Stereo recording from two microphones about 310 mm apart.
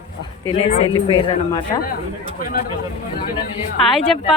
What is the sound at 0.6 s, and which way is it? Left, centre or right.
Speech, centre.